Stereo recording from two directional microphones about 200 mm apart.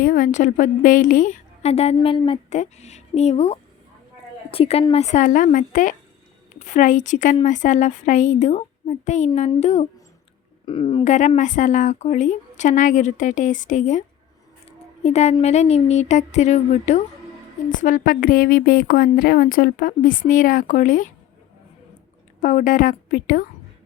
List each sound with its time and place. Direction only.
0.0 s a woman's voice: 40° left (ahead or behind); by 11.0 s 25° left (ahead or behind)
11.0 s a woman's voice: 35° left (ahead or behind)
15.0 s a woman's voice: 35° left (ahead or behind)
22.4 s a woman's voice: 40° left (ahead or behind)